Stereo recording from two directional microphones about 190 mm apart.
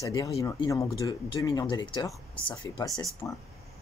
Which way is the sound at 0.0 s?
20° left (ahead or behind).